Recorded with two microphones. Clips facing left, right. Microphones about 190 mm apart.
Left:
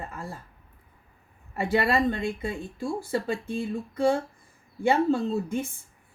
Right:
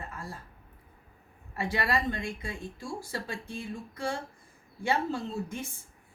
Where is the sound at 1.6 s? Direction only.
55° left (ahead or behind).